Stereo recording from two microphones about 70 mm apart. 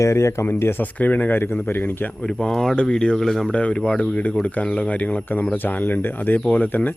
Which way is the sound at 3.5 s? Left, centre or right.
Centre.